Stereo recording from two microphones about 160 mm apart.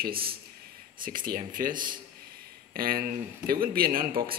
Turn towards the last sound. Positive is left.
turn(degrees=-65)  # may be behind; listen again after turning